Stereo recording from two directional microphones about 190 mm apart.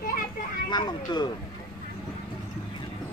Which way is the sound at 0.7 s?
20° left (ahead or behind).